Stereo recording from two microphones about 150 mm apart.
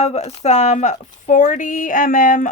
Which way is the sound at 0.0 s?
45° left (ahead or behind).